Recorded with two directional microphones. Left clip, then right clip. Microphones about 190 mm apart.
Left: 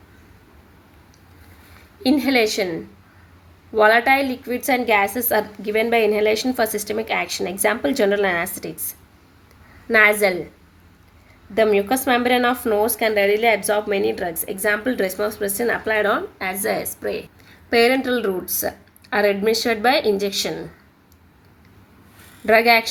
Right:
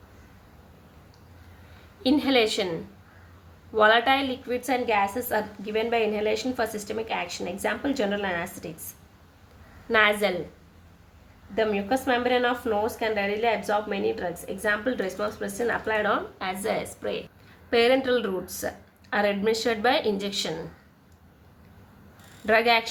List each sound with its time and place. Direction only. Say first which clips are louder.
2.2 s a woman's voice: left 4 dB; 30° left (ahead or behind)
3.8 s a woman's voice: left 5 dB; 30° left (ahead or behind)
9.9 s a woman's voice: left 6 dB; 35° left (ahead or behind)
11.9 s a woman's voice: left 6 dB; 45° left (ahead or behind)
22.4 s a woman's voice: left 6 dB; 35° left (ahead or behind)